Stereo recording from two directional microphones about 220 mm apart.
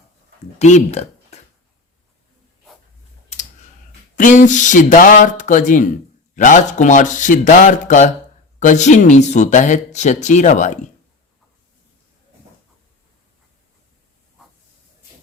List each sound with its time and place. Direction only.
0.6 s speech: 30° left (ahead or behind)
4.1 s speech: 35° left (ahead or behind)